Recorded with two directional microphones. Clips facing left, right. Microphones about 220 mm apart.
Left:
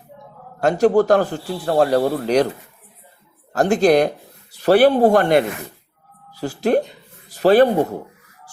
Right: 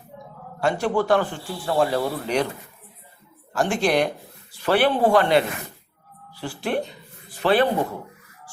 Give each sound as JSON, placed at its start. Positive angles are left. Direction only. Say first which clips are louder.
{"t": 0.6, "sound": "speech", "louder": "left 7 dB", "side_deg": 40}
{"t": 3.5, "sound": "a man's voice", "louder": "left 7 dB", "side_deg": 40}